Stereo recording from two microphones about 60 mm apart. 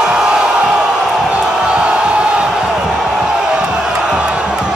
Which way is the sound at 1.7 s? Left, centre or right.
Centre.